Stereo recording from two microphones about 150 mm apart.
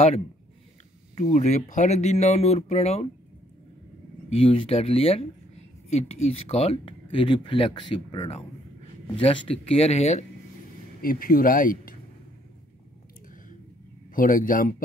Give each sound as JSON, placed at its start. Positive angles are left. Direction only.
{"t": 1.1, "sound": "speech", "side_deg": 50}
{"t": 4.3, "sound": "speech", "side_deg": 40}
{"t": 11.0, "sound": "speech", "side_deg": 70}
{"t": 14.1, "sound": "speech", "side_deg": 65}